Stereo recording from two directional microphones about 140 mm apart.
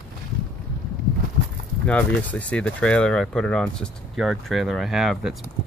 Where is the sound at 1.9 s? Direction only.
10° left (ahead or behind).